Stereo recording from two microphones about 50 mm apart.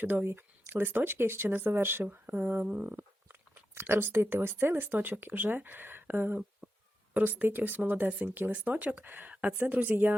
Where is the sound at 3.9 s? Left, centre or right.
Right.